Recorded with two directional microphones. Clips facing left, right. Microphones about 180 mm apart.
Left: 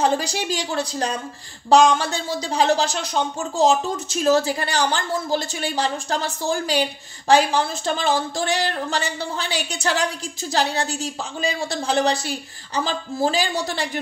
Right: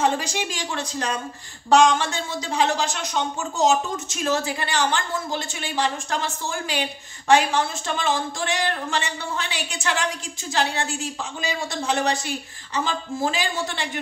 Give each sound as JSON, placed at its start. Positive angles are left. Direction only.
{"t": 0.0, "sound": "speech", "side_deg": 35}